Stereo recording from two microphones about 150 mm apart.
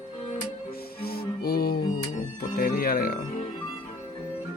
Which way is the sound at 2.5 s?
75° left (ahead or behind).